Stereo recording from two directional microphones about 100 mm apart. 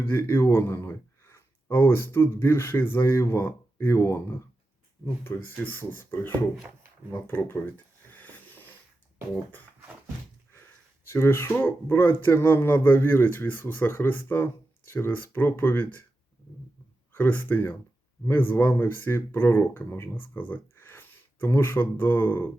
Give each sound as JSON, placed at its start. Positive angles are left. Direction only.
{"t": 0.0, "sound": "speech", "side_deg": 25}
{"t": 8.1, "sound": "wheeze", "side_deg": 20}
{"t": 11.1, "sound": "speech", "side_deg": 25}
{"t": 17.2, "sound": "speech", "side_deg": 20}